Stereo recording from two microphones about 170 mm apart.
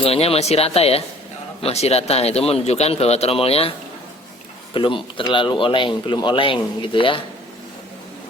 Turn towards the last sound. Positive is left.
turn(degrees=30)  # may be behind; listen again after turning